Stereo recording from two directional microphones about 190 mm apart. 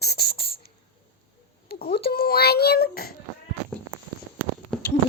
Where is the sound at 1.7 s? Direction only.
55° left (ahead or behind).